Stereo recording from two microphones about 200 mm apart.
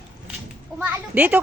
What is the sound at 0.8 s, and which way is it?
Speech, 10° right (ahead or behind).